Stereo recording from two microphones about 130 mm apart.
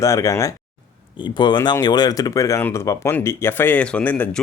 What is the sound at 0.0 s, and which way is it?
Speech, 25° left (ahead or behind).